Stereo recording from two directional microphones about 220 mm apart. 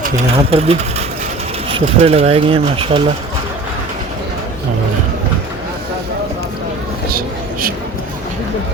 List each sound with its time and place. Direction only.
0.0 s speech: 30° right (ahead or behind)